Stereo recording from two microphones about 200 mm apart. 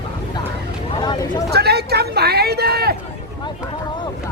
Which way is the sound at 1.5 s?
55° right (ahead or behind).